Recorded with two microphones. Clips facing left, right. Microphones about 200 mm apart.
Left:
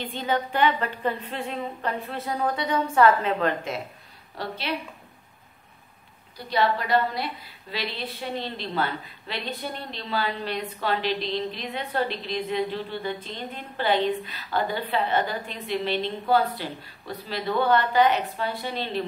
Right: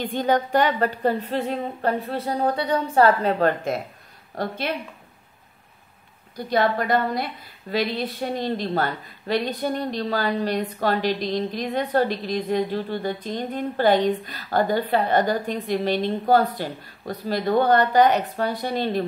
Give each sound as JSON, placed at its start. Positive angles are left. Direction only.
{"t": 0.0, "sound": "a woman's voice", "side_deg": -50}
{"t": 6.3, "sound": "a woman's voice", "side_deg": -50}